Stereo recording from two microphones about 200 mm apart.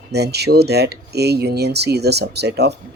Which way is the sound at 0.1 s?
55° right (ahead or behind).